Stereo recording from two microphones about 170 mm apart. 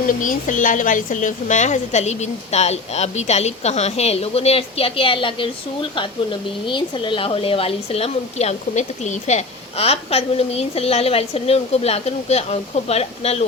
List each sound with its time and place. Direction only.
0.1 s speech: 50° left (ahead or behind); by 5.5 s 30° left (ahead or behind)
6.7 s speech: 30° left (ahead or behind)